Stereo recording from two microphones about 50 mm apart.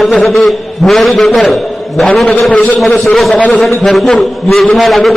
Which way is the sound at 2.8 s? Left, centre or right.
Centre.